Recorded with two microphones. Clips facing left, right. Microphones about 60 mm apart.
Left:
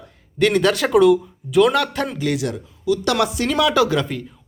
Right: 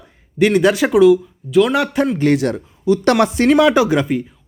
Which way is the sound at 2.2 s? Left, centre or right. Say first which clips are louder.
Right 7 dB; right.